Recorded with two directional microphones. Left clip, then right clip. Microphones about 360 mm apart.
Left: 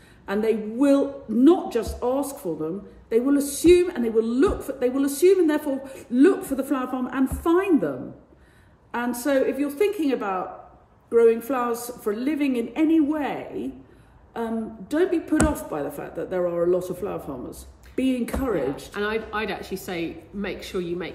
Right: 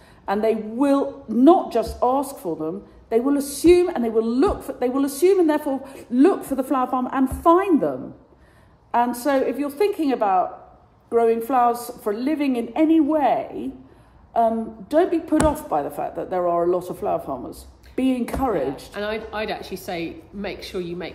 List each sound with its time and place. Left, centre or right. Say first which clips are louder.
0.2 s speech: right 3 dB; centre
8.9 s speech: right 4 dB; centre
18.9 s a woman's voice: left 1 dB; centre